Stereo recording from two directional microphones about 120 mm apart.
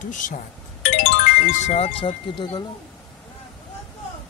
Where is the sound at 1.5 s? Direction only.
70° left (ahead or behind); by 2.7 s 40° left (ahead or behind).